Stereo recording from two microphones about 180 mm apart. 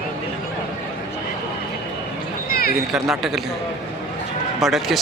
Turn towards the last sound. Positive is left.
turn(degrees=0)  # may be behind; listen again after turning